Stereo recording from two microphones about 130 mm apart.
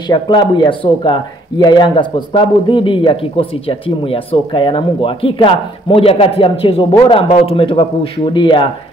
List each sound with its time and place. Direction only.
0.1 s speech: 35° left (ahead or behind)